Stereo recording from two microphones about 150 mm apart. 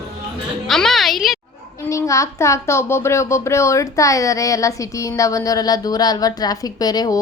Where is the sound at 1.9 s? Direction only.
20° left (ahead or behind).